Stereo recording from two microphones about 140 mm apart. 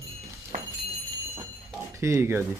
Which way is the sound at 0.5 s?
80° right.